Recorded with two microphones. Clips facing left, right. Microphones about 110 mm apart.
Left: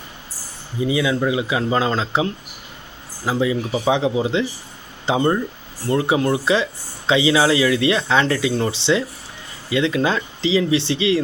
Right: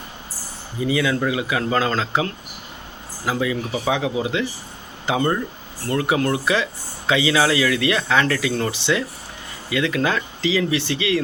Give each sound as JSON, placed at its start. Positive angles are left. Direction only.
{"t": 0.8, "sound": "speech", "side_deg": 20}